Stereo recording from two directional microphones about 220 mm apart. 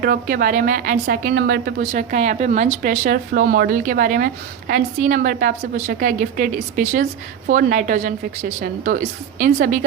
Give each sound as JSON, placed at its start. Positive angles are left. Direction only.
{"t": 0.0, "sound": "a woman's voice", "side_deg": -40}